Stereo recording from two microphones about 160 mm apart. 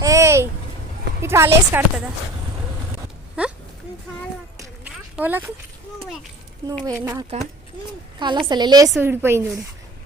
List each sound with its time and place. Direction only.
0.0 s babbling: 20° right (ahead or behind)
1.2 s a woman's voice: 15° right (ahead or behind)
3.4 s speech: 5° right (ahead or behind)
4.8 s a sound: 10° right (ahead or behind)
6.8 s a woman's voice: 20° right (ahead or behind)
9.0 s a woman's voice: 15° right (ahead or behind)